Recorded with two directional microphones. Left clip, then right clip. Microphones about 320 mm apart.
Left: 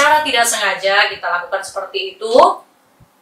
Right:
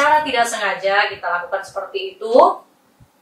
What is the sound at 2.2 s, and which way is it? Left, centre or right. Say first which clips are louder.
Speech: left 2 dB; centre.